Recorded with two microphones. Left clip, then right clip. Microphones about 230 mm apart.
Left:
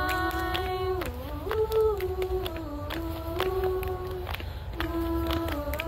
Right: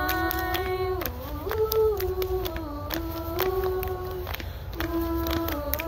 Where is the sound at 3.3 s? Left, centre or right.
Centre.